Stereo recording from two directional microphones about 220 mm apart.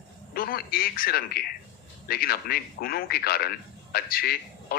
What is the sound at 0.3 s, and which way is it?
Speech, 40° left (ahead or behind).